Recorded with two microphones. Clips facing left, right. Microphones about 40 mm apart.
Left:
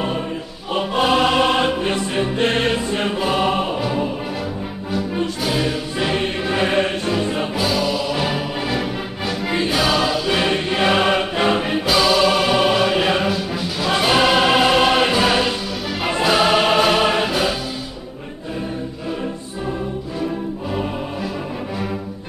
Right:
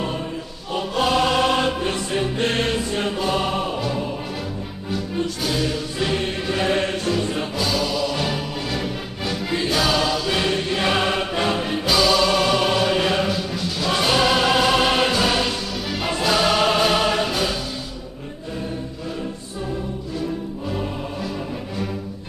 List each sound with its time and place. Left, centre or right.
0.7 s music: left; by 4.0 s centre
5.4 s music: centre
9.5 s music: centre
9.8 s music: centre
10.5 s music: left